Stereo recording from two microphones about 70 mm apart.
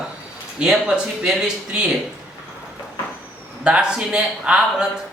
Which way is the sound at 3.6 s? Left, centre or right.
Centre.